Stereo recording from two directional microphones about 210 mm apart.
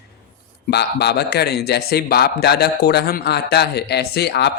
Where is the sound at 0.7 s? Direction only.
50° left (ahead or behind).